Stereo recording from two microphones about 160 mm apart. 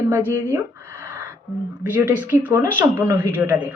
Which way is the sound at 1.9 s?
10° right (ahead or behind).